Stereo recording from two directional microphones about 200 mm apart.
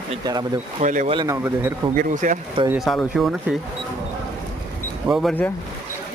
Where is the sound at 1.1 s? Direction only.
20° right (ahead or behind).